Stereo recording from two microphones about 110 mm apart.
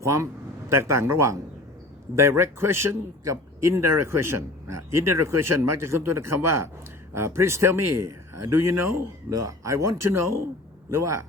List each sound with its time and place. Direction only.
0.0 s a man's voice: 25° right (ahead or behind)
9.3 s a man's voice: 30° right (ahead or behind)